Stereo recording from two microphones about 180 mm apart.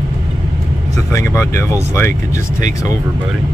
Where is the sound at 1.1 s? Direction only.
15° left (ahead or behind).